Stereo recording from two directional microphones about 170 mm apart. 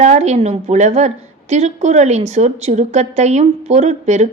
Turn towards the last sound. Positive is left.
turn(degrees=-40)  # may be behind; listen again after turning